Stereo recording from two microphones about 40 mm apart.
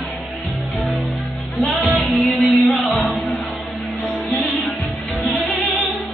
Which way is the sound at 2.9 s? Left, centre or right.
Centre.